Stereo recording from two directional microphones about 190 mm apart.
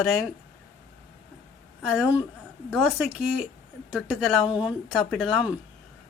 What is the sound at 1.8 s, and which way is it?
A woman's voice, 5° right (ahead or behind).